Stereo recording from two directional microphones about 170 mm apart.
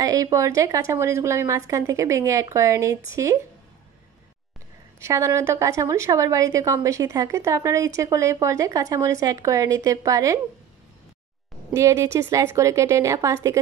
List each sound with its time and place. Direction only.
0.0 s a woman's voice: 20° right (ahead or behind)
5.0 s a woman's voice: 15° right (ahead or behind)
11.7 s a woman's voice: 15° right (ahead or behind)